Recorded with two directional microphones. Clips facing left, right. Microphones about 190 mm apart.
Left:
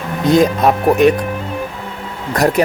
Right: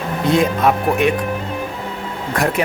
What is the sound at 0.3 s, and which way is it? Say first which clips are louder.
Speech: left 4 dB; 40° left (ahead or behind).